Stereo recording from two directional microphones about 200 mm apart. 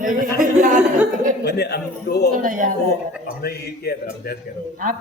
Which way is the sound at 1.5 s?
55° left (ahead or behind).